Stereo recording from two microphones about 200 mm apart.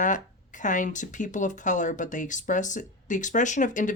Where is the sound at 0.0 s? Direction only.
40° left (ahead or behind).